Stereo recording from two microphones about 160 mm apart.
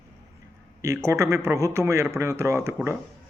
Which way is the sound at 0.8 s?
20° right (ahead or behind).